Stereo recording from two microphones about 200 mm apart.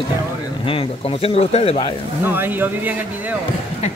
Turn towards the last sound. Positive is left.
turn(degrees=-10)  # may be behind; listen again after turning